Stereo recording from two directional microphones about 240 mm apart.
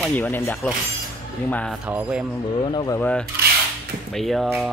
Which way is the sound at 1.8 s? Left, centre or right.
Centre.